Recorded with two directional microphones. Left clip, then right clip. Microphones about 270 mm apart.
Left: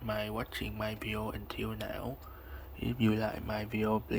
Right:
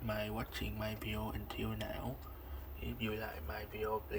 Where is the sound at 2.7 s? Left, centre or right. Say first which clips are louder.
Left 9 dB; left.